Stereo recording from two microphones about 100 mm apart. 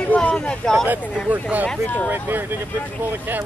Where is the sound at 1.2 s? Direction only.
15° right (ahead or behind).